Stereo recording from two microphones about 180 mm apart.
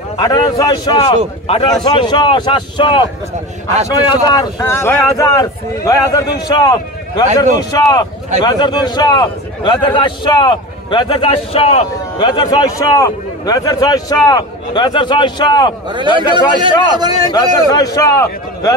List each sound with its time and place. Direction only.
0.2 s speech: 20° left (ahead or behind)
16.2 s a man's voice: 25° right (ahead or behind)
17.3 s speech: 20° left (ahead or behind)